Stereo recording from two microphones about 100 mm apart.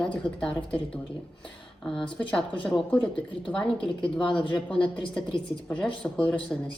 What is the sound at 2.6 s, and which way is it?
Speech, 10° left (ahead or behind).